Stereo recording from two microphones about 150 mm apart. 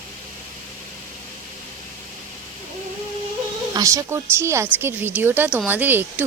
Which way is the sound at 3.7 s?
25° right (ahead or behind).